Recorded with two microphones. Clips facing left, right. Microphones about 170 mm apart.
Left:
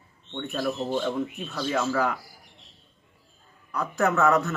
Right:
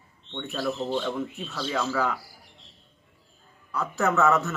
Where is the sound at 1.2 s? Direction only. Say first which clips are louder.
Left 2 dB; 15° left (ahead or behind).